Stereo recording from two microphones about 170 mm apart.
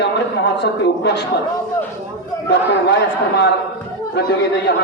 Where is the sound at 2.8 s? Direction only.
85° left.